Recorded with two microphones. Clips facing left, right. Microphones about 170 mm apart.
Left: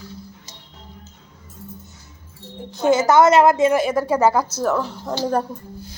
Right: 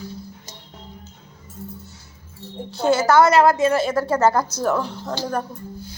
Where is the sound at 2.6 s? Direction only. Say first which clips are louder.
Left 1 dB; 15° left (ahead or behind).